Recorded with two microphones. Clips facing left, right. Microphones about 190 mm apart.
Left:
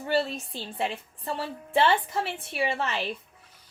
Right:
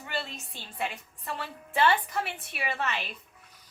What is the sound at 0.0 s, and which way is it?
A woman's voice, 35° left (ahead or behind).